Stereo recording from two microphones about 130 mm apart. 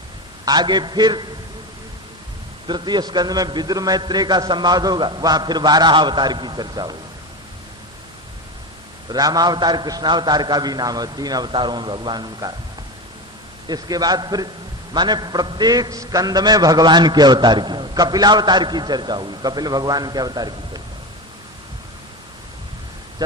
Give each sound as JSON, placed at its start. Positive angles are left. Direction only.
{"t": 0.4, "sound": "a man's voice", "side_deg": -35}
{"t": 2.6, "sound": "a man's voice", "side_deg": -35}
{"t": 9.0, "sound": "a man's voice", "side_deg": -30}
{"t": 13.7, "sound": "a man's voice", "side_deg": -30}